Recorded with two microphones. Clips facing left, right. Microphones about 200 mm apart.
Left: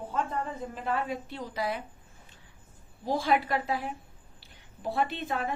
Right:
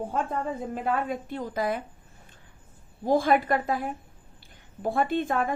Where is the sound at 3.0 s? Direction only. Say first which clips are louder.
Right 5 dB; 50° right (ahead or behind).